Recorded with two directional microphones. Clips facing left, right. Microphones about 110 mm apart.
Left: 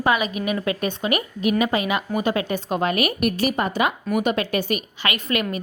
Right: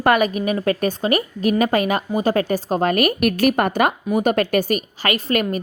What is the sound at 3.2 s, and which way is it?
A woman's voice, 60° right (ahead or behind).